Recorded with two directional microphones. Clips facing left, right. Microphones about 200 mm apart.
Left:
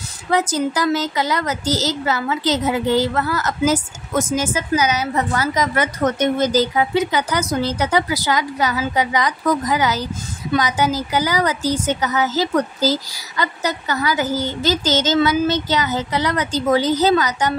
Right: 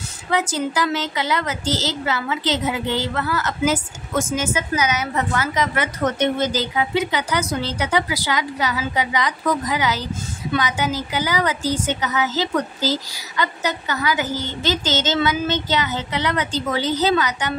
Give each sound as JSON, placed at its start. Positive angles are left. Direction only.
{"t": 0.3, "sound": "a woman's voice", "side_deg": 40}